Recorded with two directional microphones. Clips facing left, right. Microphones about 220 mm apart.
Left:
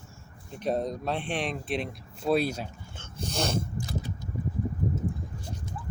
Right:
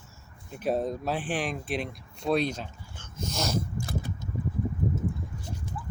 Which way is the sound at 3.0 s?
35° left (ahead or behind).